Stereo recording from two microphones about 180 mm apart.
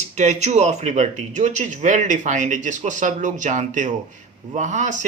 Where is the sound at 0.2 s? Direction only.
40° right (ahead or behind).